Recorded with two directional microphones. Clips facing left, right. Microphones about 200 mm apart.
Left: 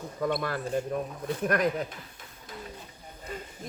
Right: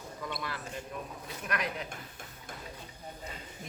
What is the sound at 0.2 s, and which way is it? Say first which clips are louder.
Speech: left 11 dB; 50° left (ahead or behind).